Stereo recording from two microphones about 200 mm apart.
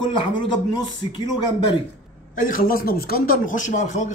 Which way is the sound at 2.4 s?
45° left (ahead or behind).